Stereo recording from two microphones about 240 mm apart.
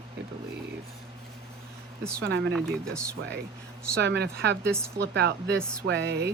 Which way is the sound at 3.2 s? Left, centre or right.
Right.